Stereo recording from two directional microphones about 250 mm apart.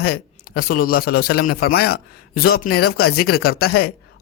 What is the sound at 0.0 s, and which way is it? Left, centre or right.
A man's voice, left.